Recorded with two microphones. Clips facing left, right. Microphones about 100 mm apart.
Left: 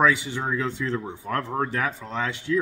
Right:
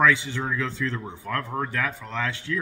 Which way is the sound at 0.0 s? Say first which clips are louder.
Even; 15° left (ahead or behind).